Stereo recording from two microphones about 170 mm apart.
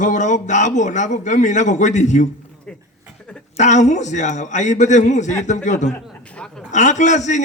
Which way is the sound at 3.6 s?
45° left (ahead or behind).